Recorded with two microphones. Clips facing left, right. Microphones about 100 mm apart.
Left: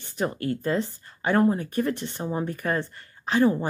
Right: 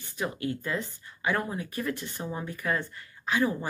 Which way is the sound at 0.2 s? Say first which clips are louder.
Left 5 dB; 35° left (ahead or behind).